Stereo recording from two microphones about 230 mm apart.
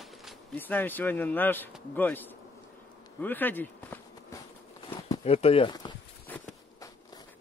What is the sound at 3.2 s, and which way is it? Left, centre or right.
Speech, centre.